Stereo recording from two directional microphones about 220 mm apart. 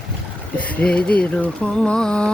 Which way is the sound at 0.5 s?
5° left (ahead or behind).